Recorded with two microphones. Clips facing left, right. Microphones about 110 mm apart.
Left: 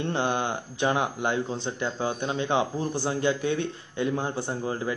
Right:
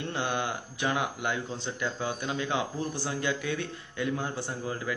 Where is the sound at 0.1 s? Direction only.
30° left (ahead or behind).